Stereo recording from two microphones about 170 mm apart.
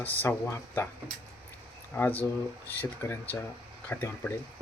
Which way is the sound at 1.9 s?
10° left (ahead or behind).